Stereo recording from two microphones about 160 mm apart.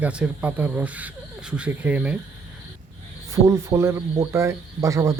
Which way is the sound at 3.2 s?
20° right (ahead or behind).